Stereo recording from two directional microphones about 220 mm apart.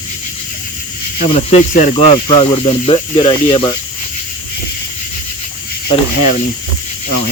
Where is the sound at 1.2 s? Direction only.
30° left (ahead or behind).